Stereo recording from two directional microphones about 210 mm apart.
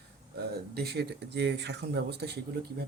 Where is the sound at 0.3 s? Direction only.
50° right (ahead or behind).